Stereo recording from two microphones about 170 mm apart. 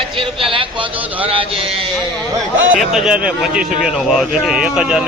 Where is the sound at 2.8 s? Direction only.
5° right (ahead or behind).